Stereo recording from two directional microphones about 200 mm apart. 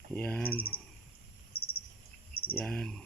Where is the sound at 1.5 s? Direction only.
50° left (ahead or behind).